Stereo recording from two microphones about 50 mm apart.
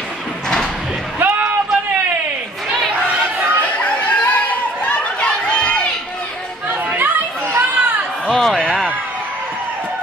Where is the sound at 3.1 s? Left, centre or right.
Right.